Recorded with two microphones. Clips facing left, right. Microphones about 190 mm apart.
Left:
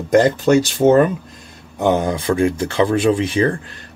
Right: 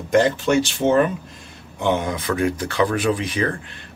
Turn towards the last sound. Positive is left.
turn(degrees=30)  # may be behind; listen again after turning